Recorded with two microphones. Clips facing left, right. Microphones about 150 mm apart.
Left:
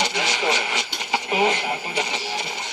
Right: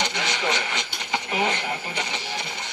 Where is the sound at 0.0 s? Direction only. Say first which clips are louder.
Left 3 dB; 10° left (ahead or behind).